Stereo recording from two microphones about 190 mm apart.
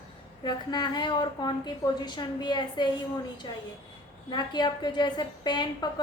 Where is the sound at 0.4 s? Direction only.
20° left (ahead or behind).